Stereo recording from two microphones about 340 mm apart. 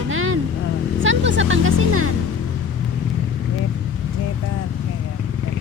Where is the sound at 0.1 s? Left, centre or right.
Right.